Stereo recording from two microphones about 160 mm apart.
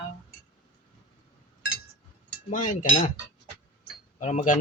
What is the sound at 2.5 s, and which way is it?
Speech, 55° left (ahead or behind).